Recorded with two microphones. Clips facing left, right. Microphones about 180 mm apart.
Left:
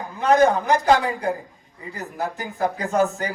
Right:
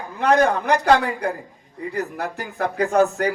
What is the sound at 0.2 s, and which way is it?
A man's voice, 65° right (ahead or behind).